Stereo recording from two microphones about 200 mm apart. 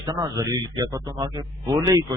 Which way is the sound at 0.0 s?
20° right (ahead or behind).